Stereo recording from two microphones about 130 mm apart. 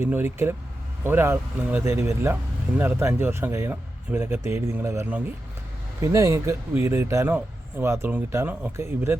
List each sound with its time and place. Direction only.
0.0 s speech: 15° right (ahead or behind)